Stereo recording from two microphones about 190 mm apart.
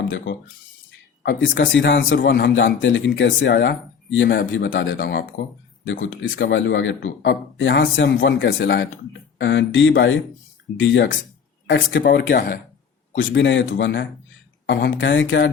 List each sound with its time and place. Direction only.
1.2 s speech: 65° left (ahead or behind)
4.9 s speech: 50° left (ahead or behind)
5.8 s speech: 80° left; by 12.5 s 60° left (ahead or behind)
13.1 s speech: 70° left (ahead or behind)